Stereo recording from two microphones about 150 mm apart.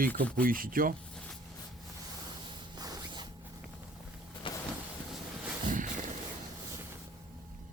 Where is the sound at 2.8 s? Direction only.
25° right (ahead or behind).